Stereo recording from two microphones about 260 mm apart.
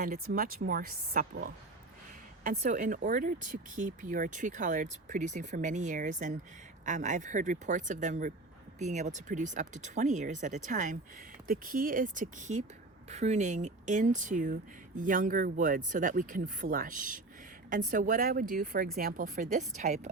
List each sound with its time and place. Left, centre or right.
0.0 s speech: right